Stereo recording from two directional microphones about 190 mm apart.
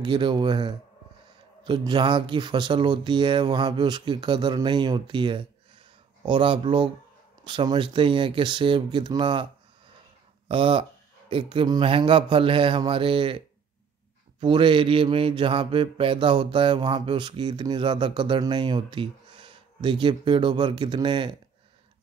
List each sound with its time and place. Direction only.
0.0 s mantra: 25° right (ahead or behind)
10.5 s mantra: 25° right (ahead or behind)
14.4 s mantra: 25° right (ahead or behind)